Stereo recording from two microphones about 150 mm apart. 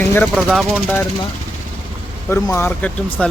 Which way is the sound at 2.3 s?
20° left (ahead or behind).